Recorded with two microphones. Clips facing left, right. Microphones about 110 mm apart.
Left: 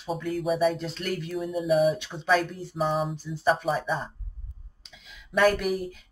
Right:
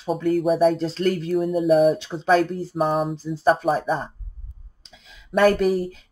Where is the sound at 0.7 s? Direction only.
35° right (ahead or behind).